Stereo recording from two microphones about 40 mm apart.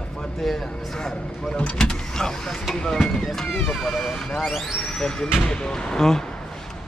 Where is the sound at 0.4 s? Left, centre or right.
Centre.